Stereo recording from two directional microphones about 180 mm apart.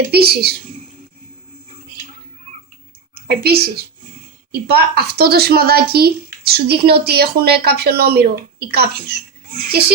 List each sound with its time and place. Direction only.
0.1 s speech: 60° right (ahead or behind)
3.2 s speech: 60° right (ahead or behind)